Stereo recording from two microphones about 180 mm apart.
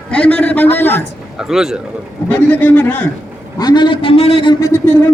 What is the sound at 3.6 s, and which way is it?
Speech, 25° left (ahead or behind).